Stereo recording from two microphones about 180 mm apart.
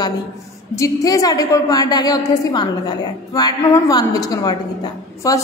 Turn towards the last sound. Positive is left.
turn(degrees=20)  # may be behind; listen again after turning